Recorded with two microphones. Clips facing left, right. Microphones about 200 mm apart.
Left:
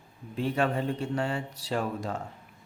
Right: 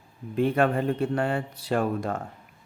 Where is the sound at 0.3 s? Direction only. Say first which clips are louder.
Right 5 dB; 55° right (ahead or behind).